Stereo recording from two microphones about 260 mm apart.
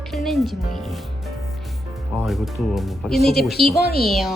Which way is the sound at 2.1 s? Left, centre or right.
Centre.